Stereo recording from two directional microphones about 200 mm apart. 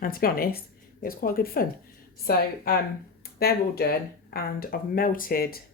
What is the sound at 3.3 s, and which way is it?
Speech, 50° left (ahead or behind).